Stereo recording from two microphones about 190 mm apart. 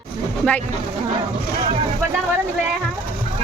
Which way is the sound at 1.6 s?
30° right (ahead or behind).